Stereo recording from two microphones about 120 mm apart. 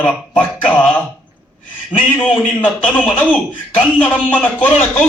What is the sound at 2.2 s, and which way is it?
Speech, 10° left (ahead or behind).